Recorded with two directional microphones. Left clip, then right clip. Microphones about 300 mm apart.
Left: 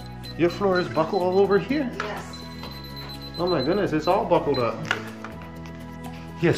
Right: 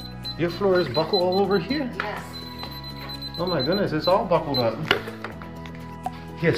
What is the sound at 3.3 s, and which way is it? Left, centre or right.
Speech, centre.